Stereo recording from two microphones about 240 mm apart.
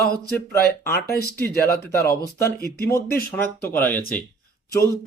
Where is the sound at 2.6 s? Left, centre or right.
Left.